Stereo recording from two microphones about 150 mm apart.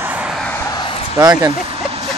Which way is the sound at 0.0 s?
10° right (ahead or behind).